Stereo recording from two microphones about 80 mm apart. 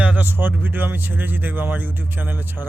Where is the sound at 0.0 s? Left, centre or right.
Centre.